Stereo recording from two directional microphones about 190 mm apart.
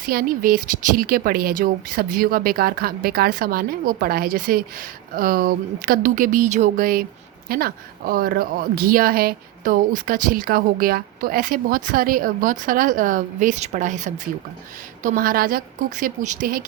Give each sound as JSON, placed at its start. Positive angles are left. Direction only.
{"t": 0.0, "sound": "speech", "side_deg": -50}